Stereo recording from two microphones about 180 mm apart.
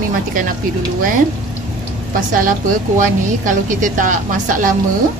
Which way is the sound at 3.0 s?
45° right (ahead or behind).